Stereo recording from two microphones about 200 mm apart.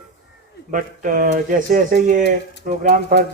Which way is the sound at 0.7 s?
40° right (ahead or behind).